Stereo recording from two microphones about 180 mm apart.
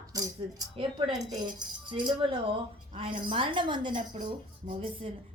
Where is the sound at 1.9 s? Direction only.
25° right (ahead or behind).